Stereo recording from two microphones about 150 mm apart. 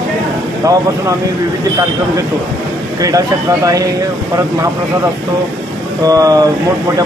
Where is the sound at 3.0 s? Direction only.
25° right (ahead or behind).